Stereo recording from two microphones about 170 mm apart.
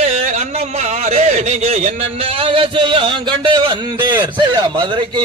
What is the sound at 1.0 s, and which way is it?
A man's voice, 40° right (ahead or behind).